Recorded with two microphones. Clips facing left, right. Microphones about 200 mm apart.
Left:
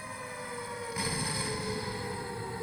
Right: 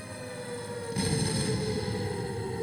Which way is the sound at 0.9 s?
30° right (ahead or behind).